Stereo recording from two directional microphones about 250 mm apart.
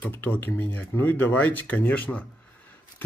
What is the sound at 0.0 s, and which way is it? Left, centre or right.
Speech, centre.